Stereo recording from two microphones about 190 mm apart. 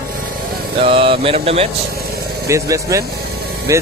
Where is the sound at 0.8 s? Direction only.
30° right (ahead or behind).